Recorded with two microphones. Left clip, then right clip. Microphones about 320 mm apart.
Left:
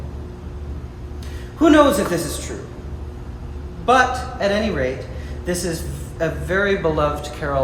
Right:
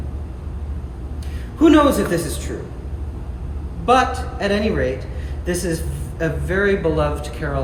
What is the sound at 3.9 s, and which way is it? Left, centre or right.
A woman's voice, centre.